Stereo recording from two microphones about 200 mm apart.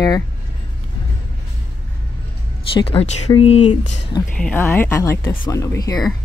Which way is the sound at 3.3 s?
25° left (ahead or behind).